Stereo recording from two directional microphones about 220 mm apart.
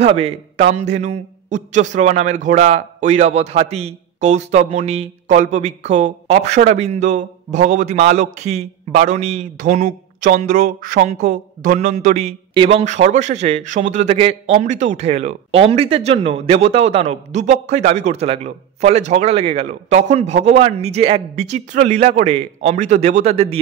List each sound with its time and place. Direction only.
0.0 s a man's voice: 25° right (ahead or behind)